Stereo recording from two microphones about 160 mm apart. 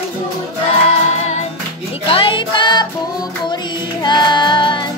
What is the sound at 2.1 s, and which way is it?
Music, 30° left (ahead or behind).